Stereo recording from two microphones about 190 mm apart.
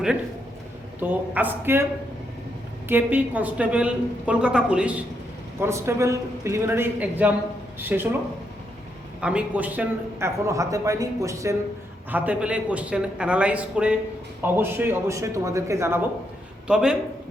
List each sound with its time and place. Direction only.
0.9 s a man's voice: 10° right (ahead or behind)
2.9 s a man's voice: 10° right (ahead or behind)
9.2 s a man's voice: 5° right (ahead or behind)
16.6 s a man's voice: 5° right (ahead or behind)